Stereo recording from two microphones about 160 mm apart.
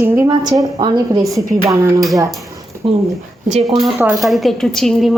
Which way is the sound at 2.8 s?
35° right (ahead or behind).